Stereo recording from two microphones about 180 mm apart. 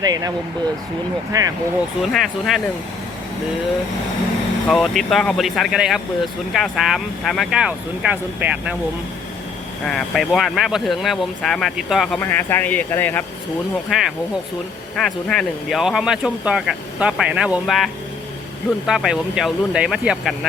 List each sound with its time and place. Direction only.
0.0 s speech: 20° right (ahead or behind)
1.3 s speech: 20° right (ahead or behind)
2.0 s speech: centre (ahead or behind)
4.7 s speech: centre (ahead or behind)
9.8 s speech: centre (ahead or behind)
13.9 s speech: centre (ahead or behind)